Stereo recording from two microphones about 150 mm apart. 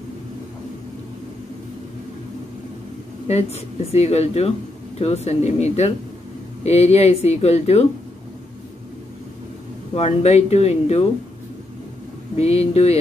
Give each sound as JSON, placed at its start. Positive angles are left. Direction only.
{"t": 3.3, "sound": "speech", "side_deg": 45}
{"t": 9.9, "sound": "speech", "side_deg": 45}
{"t": 12.4, "sound": "speech", "side_deg": 45}